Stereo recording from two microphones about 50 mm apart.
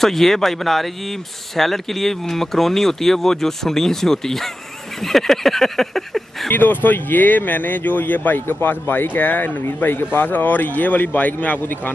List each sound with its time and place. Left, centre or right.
0.0 s speech: centre
5.0 s a sound: centre
6.5 s speech: left